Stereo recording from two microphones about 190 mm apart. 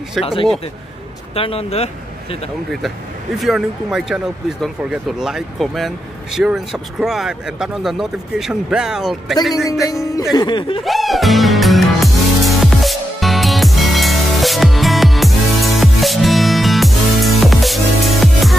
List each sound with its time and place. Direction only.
0.2 s speech: 30° left (ahead or behind)
3.3 s speech: centre (ahead or behind)
10.3 s speech: 25° left (ahead or behind)
10.8 s music: centre (ahead or behind)